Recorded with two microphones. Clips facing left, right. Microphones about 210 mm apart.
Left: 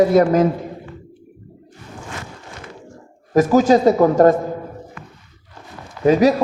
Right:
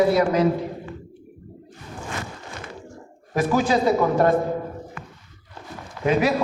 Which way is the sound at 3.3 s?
40° left (ahead or behind).